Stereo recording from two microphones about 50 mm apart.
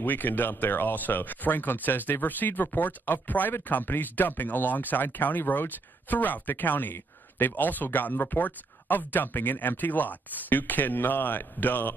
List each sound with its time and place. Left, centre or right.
0.0 s speech: left